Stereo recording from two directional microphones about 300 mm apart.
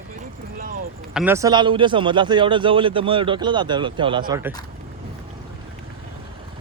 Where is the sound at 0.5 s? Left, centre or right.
Right.